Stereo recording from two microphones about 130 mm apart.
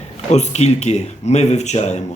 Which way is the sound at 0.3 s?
60° left (ahead or behind).